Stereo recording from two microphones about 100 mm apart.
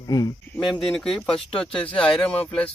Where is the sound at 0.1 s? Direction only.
35° left (ahead or behind).